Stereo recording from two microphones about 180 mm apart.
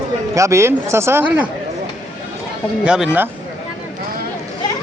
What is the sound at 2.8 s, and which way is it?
Speech, 5° right (ahead or behind).